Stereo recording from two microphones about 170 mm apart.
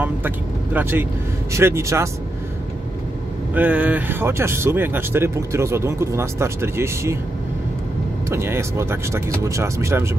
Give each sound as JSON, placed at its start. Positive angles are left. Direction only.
{"t": 0.7, "sound": "speech", "side_deg": -10}
{"t": 3.5, "sound": "speech", "side_deg": -10}
{"t": 8.3, "sound": "speech", "side_deg": -15}